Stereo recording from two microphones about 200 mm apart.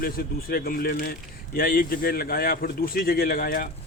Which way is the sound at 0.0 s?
50° left (ahead or behind).